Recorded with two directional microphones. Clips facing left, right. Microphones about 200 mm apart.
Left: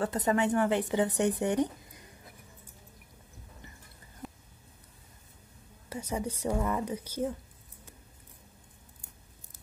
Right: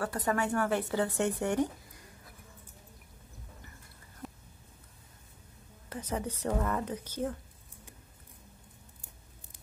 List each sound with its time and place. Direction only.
0.0 s speech: 20° left (ahead or behind)
4.2 s a sound: centre (ahead or behind)
5.9 s a woman's voice: 10° left (ahead or behind)